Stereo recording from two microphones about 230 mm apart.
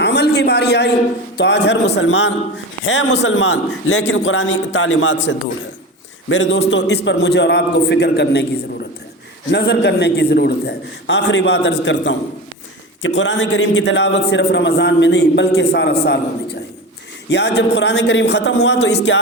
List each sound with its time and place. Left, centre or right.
0.0 s a sound: left
1.4 s a man's voice: left
9.5 s a man's voice: left
17.2 s a man's voice: left